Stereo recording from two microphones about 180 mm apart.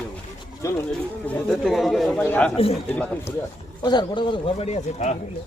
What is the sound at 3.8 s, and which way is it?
A man's voice, 25° left (ahead or behind).